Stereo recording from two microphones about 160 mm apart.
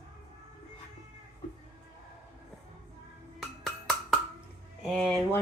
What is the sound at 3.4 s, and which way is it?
Music, centre (ahead or behind).